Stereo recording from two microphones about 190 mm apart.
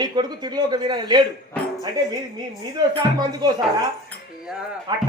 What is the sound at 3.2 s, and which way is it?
Speech, 20° right (ahead or behind).